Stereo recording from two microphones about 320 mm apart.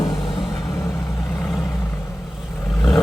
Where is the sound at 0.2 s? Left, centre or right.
Centre.